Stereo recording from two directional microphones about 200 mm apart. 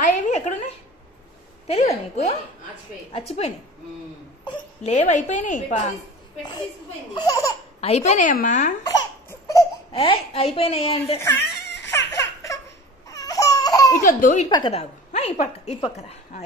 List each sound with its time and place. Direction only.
0.0 s a sound: 35° left (ahead or behind)
1.7 s a woman's voice: 30° left (ahead or behind)
7.2 s speech: 15° left (ahead or behind)
7.8 s a woman's voice: 35° left (ahead or behind)
9.3 s a sound: 15° left (ahead or behind)
9.9 s a woman's voice: 30° left (ahead or behind)
11.4 s baby cry: 60° left (ahead or behind)
12.2 s baby laughter: 15° left (ahead or behind)
13.1 s baby cry: 20° left (ahead or behind)
14.0 s a woman's voice: 40° left (ahead or behind)
14.5 s a woman's voice: 25° left (ahead or behind)